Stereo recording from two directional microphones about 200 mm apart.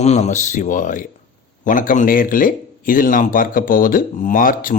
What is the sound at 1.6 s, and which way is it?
A man's voice, 40° left (ahead or behind).